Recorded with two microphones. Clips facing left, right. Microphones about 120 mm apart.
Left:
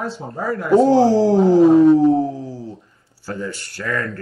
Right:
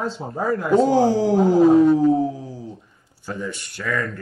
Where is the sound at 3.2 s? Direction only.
20° right (ahead or behind).